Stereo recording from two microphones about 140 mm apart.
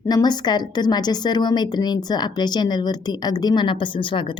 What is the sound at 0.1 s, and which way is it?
A woman's voice, 30° left (ahead or behind).